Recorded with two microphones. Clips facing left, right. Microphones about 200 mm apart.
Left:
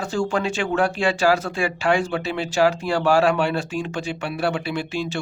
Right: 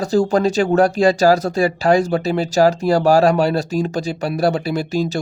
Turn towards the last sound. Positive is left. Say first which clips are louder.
# right 6 dB
turn(degrees=-40)  # may be behind; listen again after turning